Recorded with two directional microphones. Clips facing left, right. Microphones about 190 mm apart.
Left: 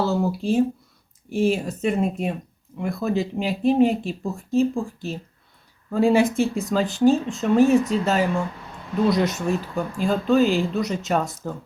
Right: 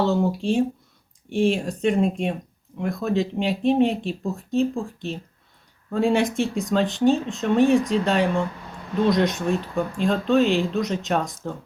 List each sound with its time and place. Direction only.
0.0 s speech: centre (ahead or behind)